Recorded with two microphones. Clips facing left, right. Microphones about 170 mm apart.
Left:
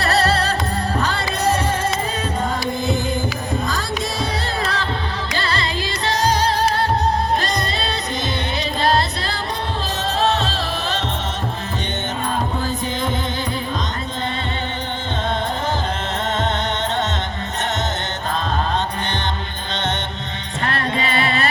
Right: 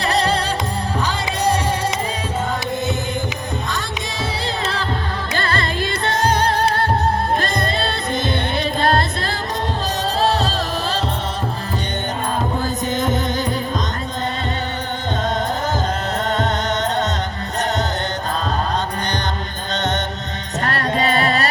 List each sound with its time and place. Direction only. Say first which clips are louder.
0.0 s music: left 1 dB; 15° right (ahead or behind)
4.6 s music: even; 30° right (ahead or behind)
5.4 s music: right 2 dB; 50° right (ahead or behind)
8.8 s music: even; 50° right (ahead or behind)
20.6 s music: right 2 dB; 40° right (ahead or behind)